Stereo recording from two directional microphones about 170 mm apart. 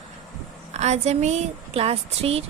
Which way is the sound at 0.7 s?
40° right (ahead or behind).